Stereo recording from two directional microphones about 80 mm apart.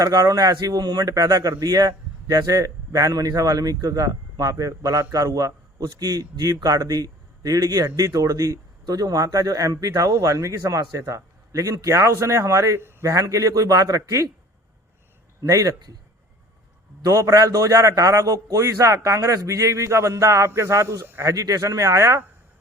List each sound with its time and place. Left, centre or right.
0.0 s a man's voice: right
15.4 s a man's voice: right
17.0 s a man's voice: right